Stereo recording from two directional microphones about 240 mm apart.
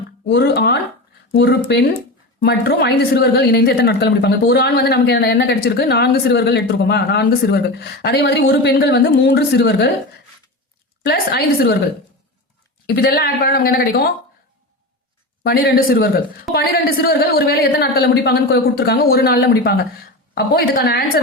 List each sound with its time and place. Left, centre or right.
0.3 s a woman's voice: left
11.0 s a man's voice: left
12.9 s a man's voice: left
15.4 s a man's voice: left